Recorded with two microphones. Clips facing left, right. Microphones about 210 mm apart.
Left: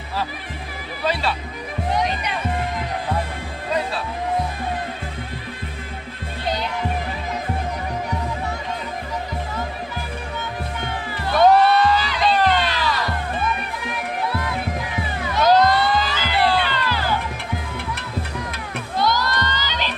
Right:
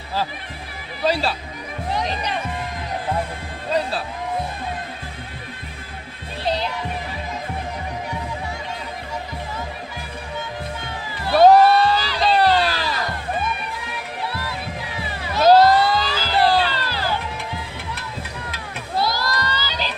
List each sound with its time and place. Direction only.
6.4 s music: 30° right (ahead or behind)
11.2 s music: 35° right (ahead or behind)
15.3 s music: 30° right (ahead or behind)
18.9 s a sound: 35° right (ahead or behind)